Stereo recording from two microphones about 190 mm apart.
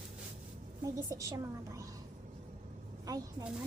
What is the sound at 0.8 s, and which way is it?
A woman's voice, 15° right (ahead or behind).